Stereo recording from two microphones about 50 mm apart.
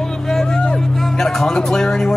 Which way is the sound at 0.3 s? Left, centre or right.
Centre.